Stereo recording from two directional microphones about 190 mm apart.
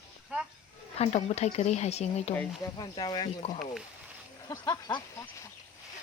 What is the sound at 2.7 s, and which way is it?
Speech, 25° left (ahead or behind).